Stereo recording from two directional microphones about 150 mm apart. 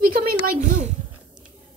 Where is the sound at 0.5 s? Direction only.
50° right (ahead or behind).